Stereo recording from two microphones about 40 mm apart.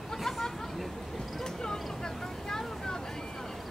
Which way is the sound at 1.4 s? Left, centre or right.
Centre.